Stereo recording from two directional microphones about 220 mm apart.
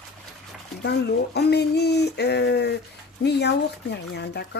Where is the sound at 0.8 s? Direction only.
50° left (ahead or behind).